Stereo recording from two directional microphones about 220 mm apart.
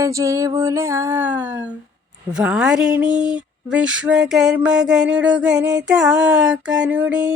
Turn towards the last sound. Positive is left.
turn(degrees=-5)  # may be behind; listen again after turning